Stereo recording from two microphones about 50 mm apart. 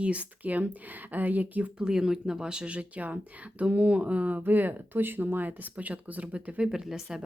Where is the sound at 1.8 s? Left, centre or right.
Centre.